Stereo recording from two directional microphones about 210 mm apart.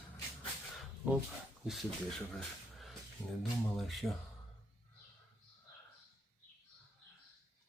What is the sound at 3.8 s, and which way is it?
Speech, centre (ahead or behind).